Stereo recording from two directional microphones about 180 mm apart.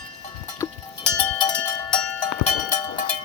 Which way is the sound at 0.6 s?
15° left (ahead or behind).